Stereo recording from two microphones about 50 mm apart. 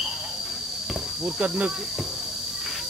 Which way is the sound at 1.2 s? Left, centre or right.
Centre.